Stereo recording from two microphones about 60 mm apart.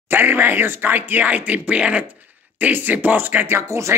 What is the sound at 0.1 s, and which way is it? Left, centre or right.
Speech, right.